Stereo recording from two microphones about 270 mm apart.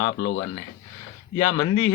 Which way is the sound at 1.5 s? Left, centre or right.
Left.